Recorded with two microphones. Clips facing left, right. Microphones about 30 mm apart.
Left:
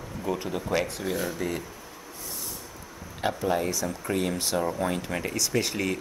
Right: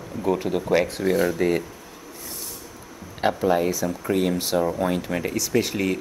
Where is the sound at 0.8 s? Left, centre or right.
Right.